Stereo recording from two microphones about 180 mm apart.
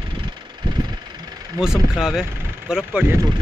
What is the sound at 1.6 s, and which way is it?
Speech, centre (ahead or behind).